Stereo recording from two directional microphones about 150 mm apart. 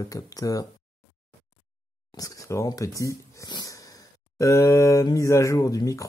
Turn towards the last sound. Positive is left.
turn(degrees=25)  # may be behind; listen again after turning